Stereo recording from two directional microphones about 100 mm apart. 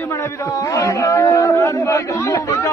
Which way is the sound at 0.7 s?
30° left (ahead or behind).